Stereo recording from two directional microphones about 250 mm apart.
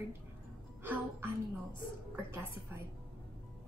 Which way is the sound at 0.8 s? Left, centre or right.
Centre.